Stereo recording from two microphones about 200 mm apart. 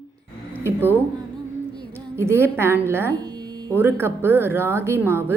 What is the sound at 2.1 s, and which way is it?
A woman's voice, 10° right (ahead or behind).